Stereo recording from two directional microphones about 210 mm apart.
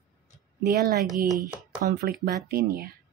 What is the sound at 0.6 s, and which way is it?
Speech, 45° right (ahead or behind).